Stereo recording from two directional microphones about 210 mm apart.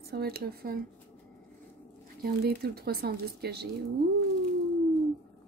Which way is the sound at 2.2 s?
50° right (ahead or behind).